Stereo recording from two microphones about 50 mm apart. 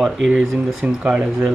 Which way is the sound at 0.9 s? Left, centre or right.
Centre.